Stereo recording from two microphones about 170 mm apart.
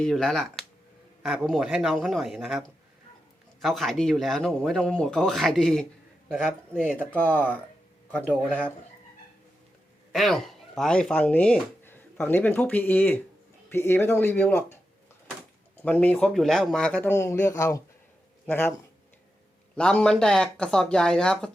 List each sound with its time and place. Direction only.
0.0 s speech: 5° left (ahead or behind)
7.3 s speech: 10° left (ahead or behind)
10.1 s speech: centre (ahead or behind)
15.8 s speech: 10° left (ahead or behind)
17.1 s speech: 15° left (ahead or behind)
19.7 s speech: 5° left (ahead or behind)